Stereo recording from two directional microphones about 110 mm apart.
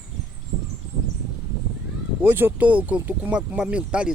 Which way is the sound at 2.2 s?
15° right (ahead or behind).